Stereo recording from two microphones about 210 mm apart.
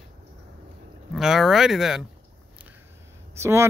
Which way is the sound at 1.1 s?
Centre (ahead or behind).